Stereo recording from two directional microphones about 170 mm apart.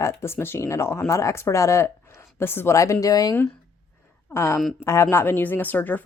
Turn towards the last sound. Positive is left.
turn(degrees=10)  # may be behind; listen again after turning